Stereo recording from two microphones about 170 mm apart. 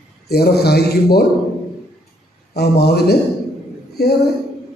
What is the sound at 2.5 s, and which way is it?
A man's voice, 70° left (ahead or behind).